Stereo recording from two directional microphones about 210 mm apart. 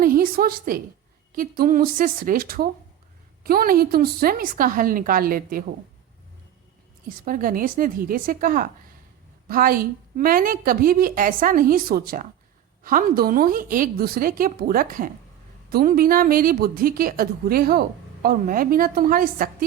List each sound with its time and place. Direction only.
0.0 s a woman's voice: 45° right (ahead or behind)
7.3 s a woman's voice: 40° right (ahead or behind)